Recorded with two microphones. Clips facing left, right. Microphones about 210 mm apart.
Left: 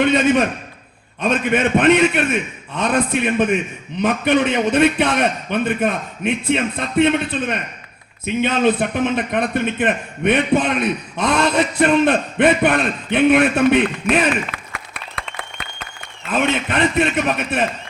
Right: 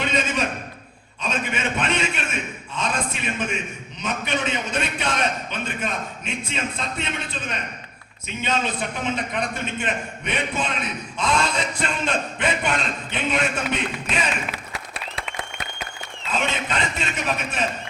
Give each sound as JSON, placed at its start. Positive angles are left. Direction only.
{"t": 0.0, "sound": "a man's voice", "side_deg": 60}